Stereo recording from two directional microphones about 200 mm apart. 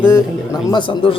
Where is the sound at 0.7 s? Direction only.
25° left (ahead or behind).